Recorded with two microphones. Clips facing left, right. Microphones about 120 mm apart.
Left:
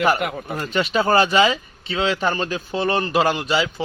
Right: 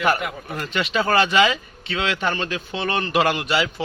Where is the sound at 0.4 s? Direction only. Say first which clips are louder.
Left 3 dB; 35° left (ahead or behind).